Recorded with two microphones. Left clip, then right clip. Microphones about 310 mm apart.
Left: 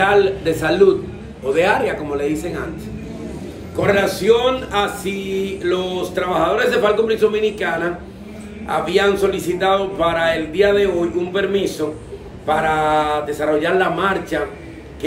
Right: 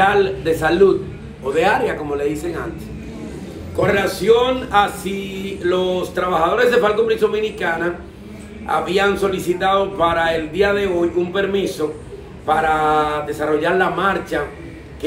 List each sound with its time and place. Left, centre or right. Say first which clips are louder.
0.0 s a man's voice: left 1 dB; centre
3.8 s a man's voice: left 1 dB; centre